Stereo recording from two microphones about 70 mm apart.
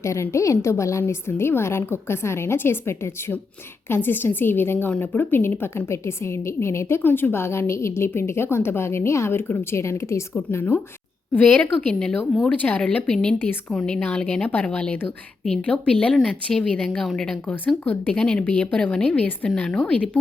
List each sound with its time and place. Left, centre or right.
0.0 s a woman's voice: left
10.5 s speech: left
11.6 s speech: centre
13.4 s speech: left
13.7 s a woman's voice: centre